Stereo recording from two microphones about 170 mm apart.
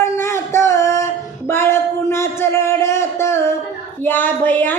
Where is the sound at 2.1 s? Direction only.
15° left (ahead or behind).